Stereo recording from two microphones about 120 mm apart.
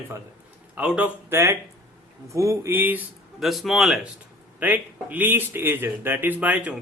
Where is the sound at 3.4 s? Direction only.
Centre (ahead or behind).